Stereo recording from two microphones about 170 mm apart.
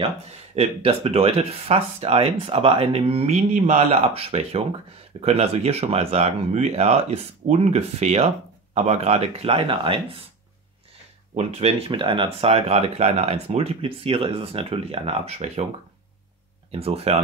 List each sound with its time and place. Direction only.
0.0 s speech: 35° right (ahead or behind)
11.3 s speech: 40° right (ahead or behind)
16.7 s speech: 35° right (ahead or behind)